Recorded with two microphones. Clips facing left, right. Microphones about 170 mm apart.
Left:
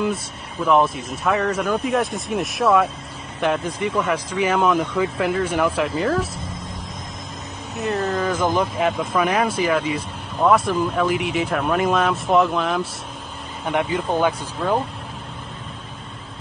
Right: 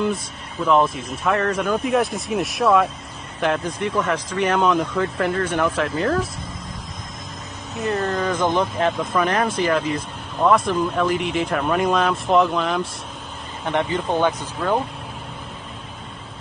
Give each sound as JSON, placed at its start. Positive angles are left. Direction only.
{"t": 0.0, "sound": "speech", "side_deg": 0}
{"t": 7.8, "sound": "speech", "side_deg": 0}